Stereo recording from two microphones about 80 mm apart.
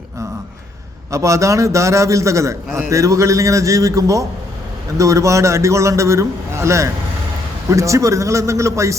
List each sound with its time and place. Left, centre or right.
1.1 s a man's voice: right